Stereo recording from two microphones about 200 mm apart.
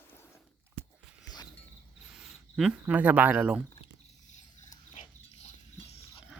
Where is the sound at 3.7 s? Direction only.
35° left (ahead or behind).